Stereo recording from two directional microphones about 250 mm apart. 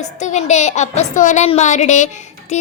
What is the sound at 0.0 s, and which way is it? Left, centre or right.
A woman's voice, left.